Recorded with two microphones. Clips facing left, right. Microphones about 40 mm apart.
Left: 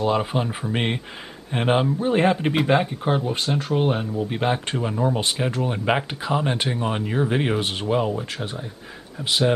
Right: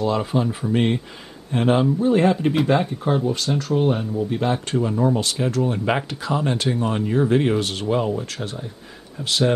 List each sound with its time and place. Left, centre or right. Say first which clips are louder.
0.0 s speech: right 1 dB; left
4.7 s speech: right 3 dB; centre